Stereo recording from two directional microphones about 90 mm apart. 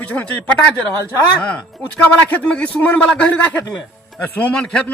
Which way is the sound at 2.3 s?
15° left (ahead or behind).